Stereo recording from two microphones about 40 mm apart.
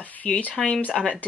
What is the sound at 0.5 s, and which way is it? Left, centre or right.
Speech, centre.